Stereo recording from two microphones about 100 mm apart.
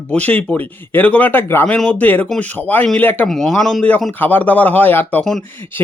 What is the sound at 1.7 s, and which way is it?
Speech, 10° left (ahead or behind).